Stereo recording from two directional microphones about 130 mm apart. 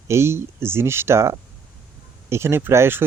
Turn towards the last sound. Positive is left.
turn(degrees=-20)  # may be behind; listen again after turning